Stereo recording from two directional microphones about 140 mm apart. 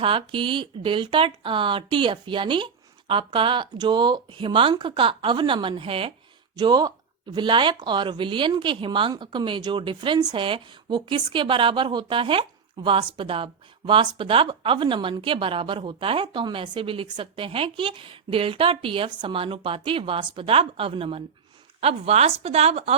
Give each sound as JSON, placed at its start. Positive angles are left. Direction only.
{"t": 0.0, "sound": "speech", "side_deg": -40}
{"t": 6.6, "sound": "speech", "side_deg": -30}